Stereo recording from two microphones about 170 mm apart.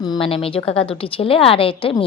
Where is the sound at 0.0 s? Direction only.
30° left (ahead or behind).